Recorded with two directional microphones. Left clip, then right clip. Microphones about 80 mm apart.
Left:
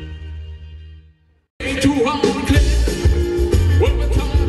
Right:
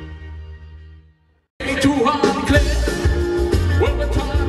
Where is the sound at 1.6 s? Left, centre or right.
Right.